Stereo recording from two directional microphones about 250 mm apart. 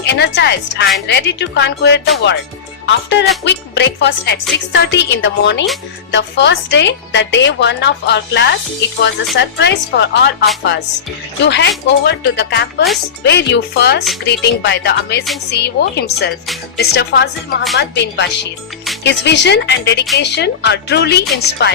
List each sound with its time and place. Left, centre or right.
0.0 s a woman's voice: left